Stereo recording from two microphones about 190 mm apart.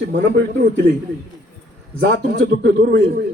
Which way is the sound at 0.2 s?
60° right (ahead or behind).